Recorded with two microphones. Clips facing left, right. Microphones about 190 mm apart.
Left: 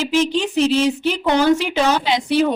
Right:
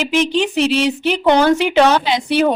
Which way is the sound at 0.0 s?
70° right (ahead or behind).